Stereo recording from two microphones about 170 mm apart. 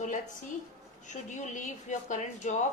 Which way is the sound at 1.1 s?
45° left (ahead or behind).